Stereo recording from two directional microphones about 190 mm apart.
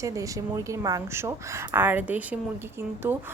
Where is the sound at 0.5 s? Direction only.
15° right (ahead or behind).